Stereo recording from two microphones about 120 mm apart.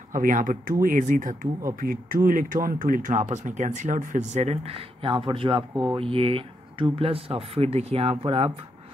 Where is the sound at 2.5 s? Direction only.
90° right; by 6.0 s 35° right (ahead or behind).